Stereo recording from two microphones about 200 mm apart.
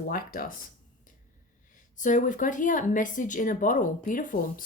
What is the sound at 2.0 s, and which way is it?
Speech, 40° left (ahead or behind).